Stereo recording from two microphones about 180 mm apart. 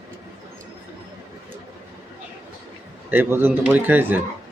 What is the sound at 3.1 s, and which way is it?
Speech, 10° right (ahead or behind).